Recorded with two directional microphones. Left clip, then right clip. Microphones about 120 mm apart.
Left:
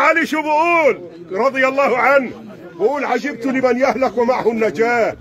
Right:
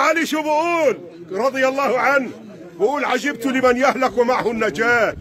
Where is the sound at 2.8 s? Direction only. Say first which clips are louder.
Left 1 dB; 50° right (ahead or behind).